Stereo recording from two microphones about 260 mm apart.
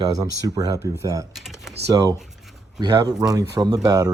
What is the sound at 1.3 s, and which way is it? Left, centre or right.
Typing, centre.